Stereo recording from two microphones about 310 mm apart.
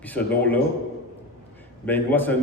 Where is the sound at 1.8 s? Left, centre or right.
Centre.